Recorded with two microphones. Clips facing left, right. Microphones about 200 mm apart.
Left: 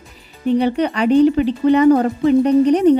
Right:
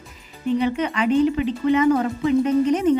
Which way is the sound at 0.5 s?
35° left (ahead or behind).